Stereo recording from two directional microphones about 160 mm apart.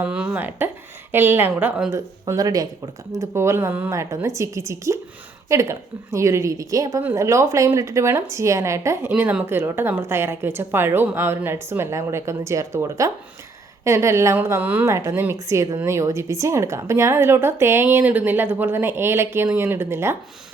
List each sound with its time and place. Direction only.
0.0 s a woman's voice: 10° right (ahead or behind)
2.2 s a woman's voice: 20° right (ahead or behind)